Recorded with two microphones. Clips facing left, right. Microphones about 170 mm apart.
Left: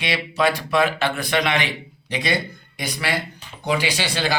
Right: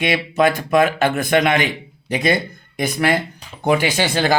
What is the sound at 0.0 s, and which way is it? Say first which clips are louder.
A man's voice: right 5 dB; 50° right (ahead or behind).